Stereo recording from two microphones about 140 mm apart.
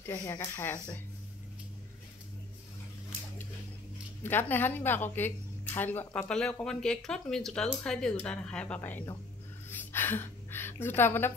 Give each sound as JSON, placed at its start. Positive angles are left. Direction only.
{"t": 0.0, "sound": "speech", "side_deg": 20}
{"t": 4.2, "sound": "a woman's voice", "side_deg": 15}
{"t": 9.7, "sound": "a sound", "side_deg": 15}